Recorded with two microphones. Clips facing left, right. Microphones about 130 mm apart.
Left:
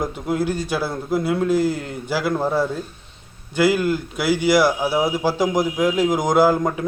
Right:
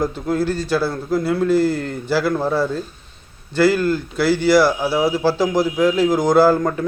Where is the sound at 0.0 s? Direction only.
15° left (ahead or behind).